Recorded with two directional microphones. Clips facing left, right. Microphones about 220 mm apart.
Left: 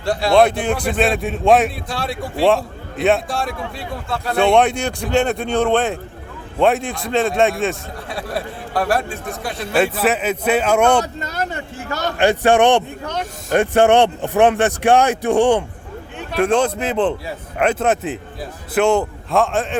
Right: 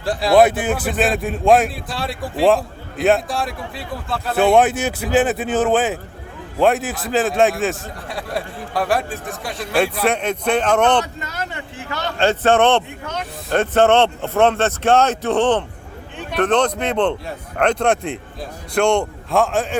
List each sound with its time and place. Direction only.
0.0 s a man's voice: centre (ahead or behind)
11.0 s speech: 40° left (ahead or behind)
12.1 s a man's voice: 15° left (ahead or behind)